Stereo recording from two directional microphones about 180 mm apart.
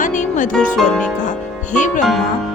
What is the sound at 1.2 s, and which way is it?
Speech, 45° left (ahead or behind).